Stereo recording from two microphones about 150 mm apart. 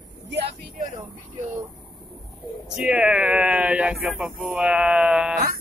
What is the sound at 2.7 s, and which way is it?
Speech, 5° right (ahead or behind).